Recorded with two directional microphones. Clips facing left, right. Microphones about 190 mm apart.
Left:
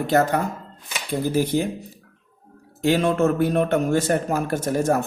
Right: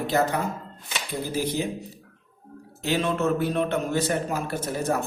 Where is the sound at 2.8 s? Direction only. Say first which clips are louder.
Left 5 dB; 45° left (ahead or behind).